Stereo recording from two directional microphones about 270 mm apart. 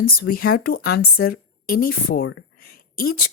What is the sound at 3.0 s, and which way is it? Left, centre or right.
Speech, left.